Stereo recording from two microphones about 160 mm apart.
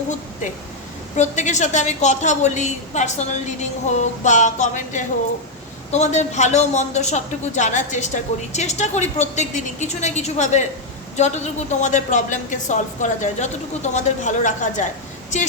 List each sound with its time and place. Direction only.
1.1 s a man's voice: 45° left (ahead or behind)